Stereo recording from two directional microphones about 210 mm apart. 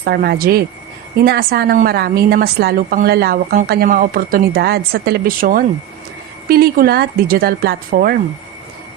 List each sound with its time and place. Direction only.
0.0 s a woman's voice: 45° right (ahead or behind)